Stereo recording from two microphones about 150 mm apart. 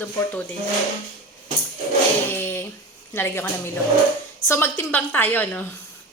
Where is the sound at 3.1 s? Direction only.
15° left (ahead or behind).